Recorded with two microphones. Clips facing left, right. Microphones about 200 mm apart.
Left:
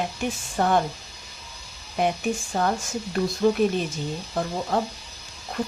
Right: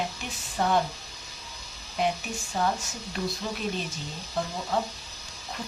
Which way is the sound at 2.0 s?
50° left (ahead or behind).